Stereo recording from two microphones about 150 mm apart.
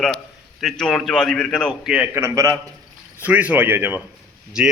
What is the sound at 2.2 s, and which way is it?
Speech, 20° right (ahead or behind).